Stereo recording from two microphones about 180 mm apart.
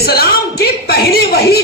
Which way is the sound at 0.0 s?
60° left (ahead or behind).